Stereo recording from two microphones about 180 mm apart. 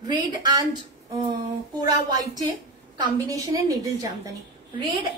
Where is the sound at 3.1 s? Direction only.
20° right (ahead or behind).